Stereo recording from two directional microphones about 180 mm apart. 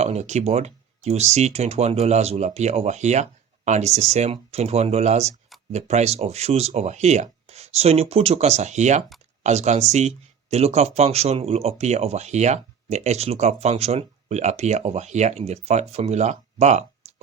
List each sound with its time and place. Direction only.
0.0 s speech: 35° right (ahead or behind)